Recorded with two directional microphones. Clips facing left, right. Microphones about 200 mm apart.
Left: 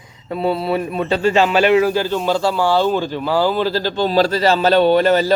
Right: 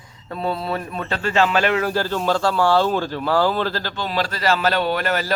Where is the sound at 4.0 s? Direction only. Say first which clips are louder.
Left 10 dB; 35° left (ahead or behind).